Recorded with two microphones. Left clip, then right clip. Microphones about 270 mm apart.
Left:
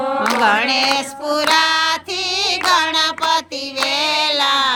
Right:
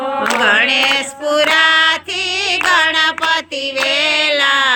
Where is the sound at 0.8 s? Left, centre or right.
Left.